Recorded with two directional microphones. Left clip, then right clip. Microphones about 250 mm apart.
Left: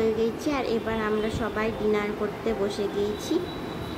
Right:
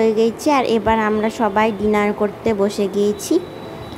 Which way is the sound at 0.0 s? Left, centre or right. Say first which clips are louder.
Right 9 dB; right.